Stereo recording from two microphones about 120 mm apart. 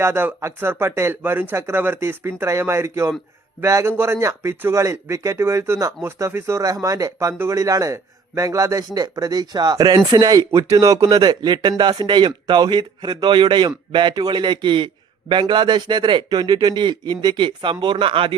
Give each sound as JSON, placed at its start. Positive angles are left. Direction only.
{"t": 0.0, "sound": "a man's voice", "side_deg": -20}